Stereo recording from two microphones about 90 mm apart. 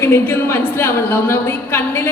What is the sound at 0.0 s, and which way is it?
Speech, 25° left (ahead or behind).